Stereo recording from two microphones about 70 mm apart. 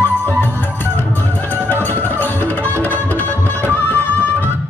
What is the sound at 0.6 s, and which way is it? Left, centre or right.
Music, left.